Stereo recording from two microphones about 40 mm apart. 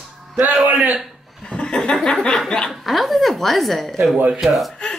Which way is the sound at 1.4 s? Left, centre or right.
Left.